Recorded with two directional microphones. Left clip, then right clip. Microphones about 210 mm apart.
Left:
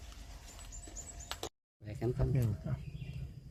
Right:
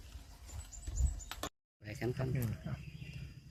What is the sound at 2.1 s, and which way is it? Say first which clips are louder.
Speech: left 3 dB; 40° left (ahead or behind).